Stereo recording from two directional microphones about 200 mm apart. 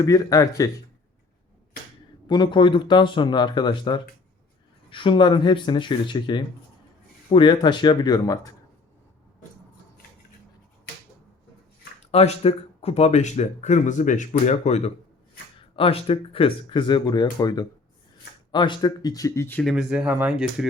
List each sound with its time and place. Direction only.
0.0 s speech: 15° left (ahead or behind)
2.2 s speech: 20° left (ahead or behind)
12.1 s speech: 30° left (ahead or behind); by 19.7 s 10° left (ahead or behind)
19.7 s speech: 5° right (ahead or behind)